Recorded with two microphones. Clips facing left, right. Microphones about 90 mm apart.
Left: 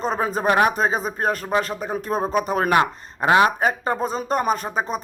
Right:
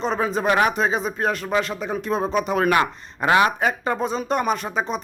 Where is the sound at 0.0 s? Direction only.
40° left (ahead or behind).